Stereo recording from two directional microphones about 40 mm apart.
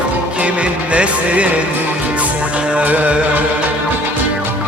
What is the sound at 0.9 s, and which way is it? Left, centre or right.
Music, right.